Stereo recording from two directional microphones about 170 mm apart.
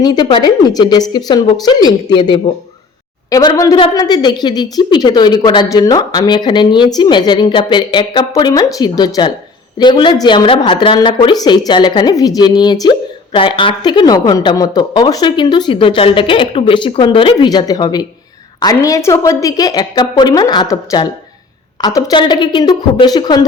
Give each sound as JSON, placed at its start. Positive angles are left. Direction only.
{"t": 0.0, "sound": "a woman's voice", "side_deg": 25}